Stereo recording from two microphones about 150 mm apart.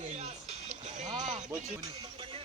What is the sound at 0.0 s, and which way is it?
Music, 45° right (ahead or behind).